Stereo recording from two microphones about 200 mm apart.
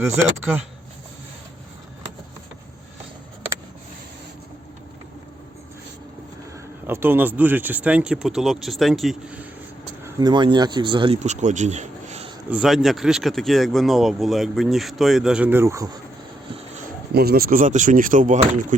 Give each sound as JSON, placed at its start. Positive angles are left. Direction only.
{"t": 6.8, "sound": "speech", "side_deg": -10}
{"t": 10.2, "sound": "speech", "side_deg": -20}
{"t": 12.5, "sound": "speech", "side_deg": -5}
{"t": 17.2, "sound": "speech", "side_deg": -50}